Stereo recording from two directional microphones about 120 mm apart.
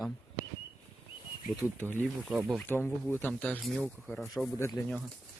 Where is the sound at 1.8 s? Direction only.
15° left (ahead or behind).